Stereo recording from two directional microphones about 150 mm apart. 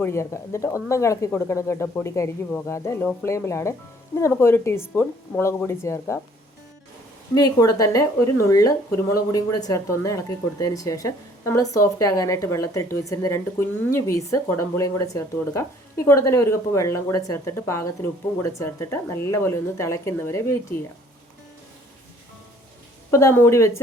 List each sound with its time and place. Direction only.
0.0 s speech: 20° left (ahead or behind)
7.3 s speech: 25° left (ahead or behind)
23.1 s speech: 20° left (ahead or behind)